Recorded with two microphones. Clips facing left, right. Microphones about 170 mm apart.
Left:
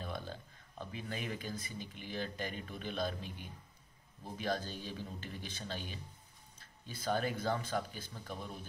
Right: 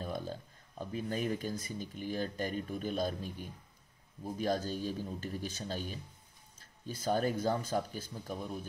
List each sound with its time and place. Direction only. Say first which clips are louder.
0.0 s speech: right 4 dB; 45° right (ahead or behind)